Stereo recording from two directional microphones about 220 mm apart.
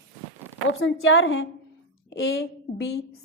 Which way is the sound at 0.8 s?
60° left (ahead or behind).